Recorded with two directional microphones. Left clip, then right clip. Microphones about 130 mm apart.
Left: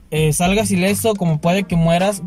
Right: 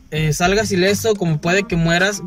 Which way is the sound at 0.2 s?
20° left (ahead or behind).